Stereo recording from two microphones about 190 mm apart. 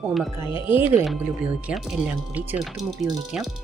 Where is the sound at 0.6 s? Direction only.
10° right (ahead or behind).